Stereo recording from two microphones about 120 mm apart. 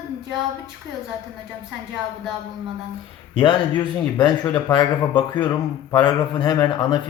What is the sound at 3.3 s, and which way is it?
A man's voice, 45° left (ahead or behind).